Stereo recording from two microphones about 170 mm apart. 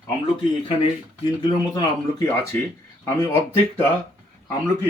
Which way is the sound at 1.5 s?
25° left (ahead or behind).